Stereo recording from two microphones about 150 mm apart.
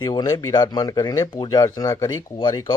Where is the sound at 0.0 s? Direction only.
30° left (ahead or behind).